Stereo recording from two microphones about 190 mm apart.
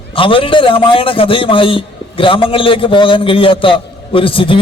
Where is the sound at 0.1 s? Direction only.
25° left (ahead or behind).